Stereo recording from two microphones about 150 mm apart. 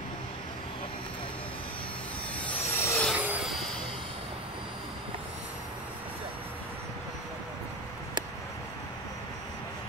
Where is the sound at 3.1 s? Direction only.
10° right (ahead or behind).